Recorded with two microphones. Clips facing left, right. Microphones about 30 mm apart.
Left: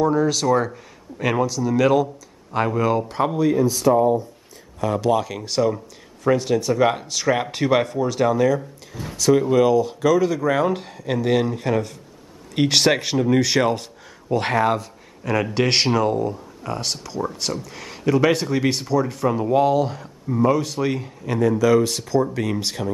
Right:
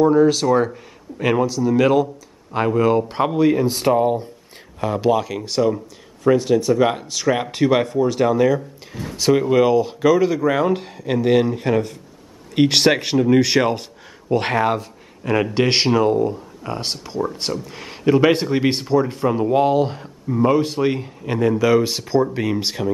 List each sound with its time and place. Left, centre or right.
0.0 s speech: centre
0.7 s speech: centre
3.3 s speech: right
5.1 s speech: centre
9.1 s speech: right
17.2 s speech: centre